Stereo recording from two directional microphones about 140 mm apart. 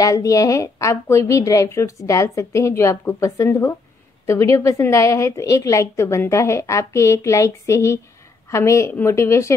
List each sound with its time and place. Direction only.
0.0 s a woman's voice: 25° left (ahead or behind)